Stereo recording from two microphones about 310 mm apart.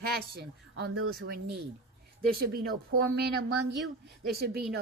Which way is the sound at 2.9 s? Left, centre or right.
Right.